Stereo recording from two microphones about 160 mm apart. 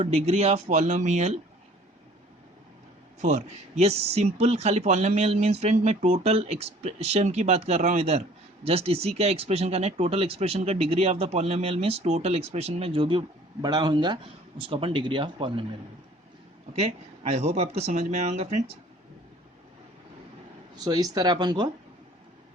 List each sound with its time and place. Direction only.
0.0 s speech: 40° right (ahead or behind)
3.2 s speech: 45° right (ahead or behind)
16.7 s speech: 45° right (ahead or behind)
20.8 s speech: 25° right (ahead or behind)